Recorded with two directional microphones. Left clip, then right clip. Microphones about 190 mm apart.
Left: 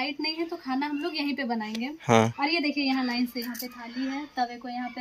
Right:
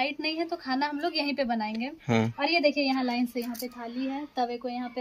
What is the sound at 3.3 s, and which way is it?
Speech, 50° right (ahead or behind).